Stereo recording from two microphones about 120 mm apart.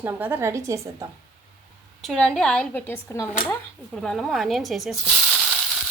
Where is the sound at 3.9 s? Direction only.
Centre (ahead or behind).